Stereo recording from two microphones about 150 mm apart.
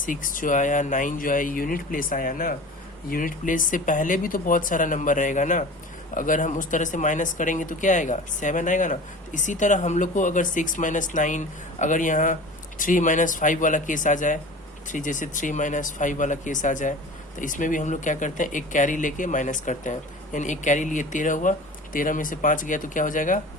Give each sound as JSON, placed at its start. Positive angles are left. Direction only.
{"t": 0.0, "sound": "speech", "side_deg": 60}